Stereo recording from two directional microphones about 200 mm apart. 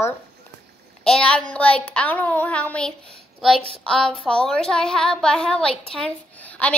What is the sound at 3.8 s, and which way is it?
Child singing, 5° left (ahead or behind).